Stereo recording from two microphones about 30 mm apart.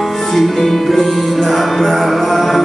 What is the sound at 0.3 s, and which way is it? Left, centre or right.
Music, centre.